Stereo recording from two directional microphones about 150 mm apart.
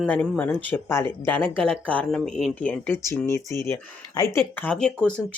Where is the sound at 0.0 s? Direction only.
5° left (ahead or behind).